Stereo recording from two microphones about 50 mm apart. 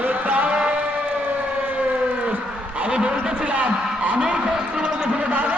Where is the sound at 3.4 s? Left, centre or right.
Right.